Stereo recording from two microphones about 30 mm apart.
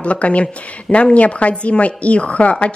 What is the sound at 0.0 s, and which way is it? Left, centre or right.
Speech, left.